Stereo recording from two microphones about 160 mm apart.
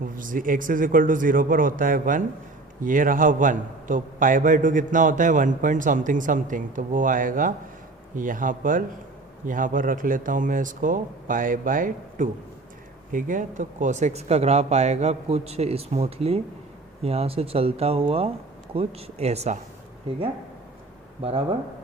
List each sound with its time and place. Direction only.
0.0 s a man's voice: 60° right (ahead or behind); by 19.5 s 40° right (ahead or behind)
21.2 s speech: 35° right (ahead or behind)